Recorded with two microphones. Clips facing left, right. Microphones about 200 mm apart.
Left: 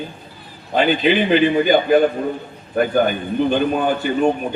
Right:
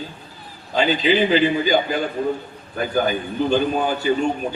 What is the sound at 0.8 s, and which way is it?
A man's voice, 55° left (ahead or behind).